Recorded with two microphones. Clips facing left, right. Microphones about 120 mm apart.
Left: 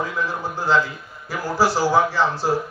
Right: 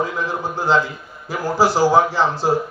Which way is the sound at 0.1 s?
15° right (ahead or behind).